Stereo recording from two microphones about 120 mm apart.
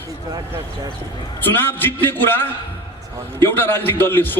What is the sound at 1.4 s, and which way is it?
A man's voice, 15° left (ahead or behind).